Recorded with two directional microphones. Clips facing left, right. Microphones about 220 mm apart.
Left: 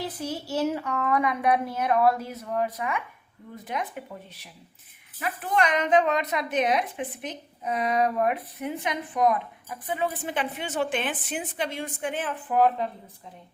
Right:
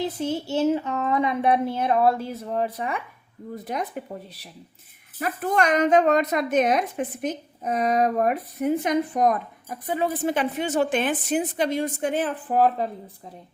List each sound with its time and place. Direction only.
0.0 s a woman's voice: 25° right (ahead or behind)